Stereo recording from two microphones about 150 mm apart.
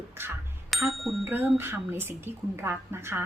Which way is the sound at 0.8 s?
Centre (ahead or behind).